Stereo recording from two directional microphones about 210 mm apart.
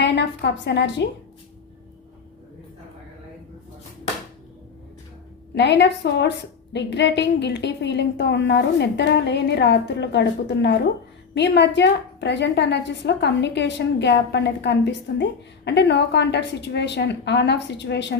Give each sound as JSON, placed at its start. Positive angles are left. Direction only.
{"t": 0.0, "sound": "a woman's voice", "side_deg": 55}
{"t": 5.5, "sound": "a woman's voice", "side_deg": 55}